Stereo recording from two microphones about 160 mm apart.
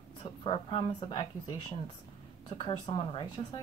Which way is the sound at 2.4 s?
30° left (ahead or behind).